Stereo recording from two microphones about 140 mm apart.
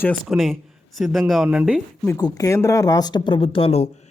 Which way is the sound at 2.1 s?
25° left (ahead or behind).